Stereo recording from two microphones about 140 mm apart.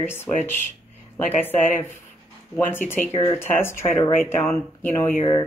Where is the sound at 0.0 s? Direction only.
15° left (ahead or behind).